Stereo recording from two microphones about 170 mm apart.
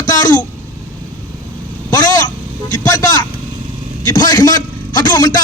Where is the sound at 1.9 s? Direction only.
20° left (ahead or behind).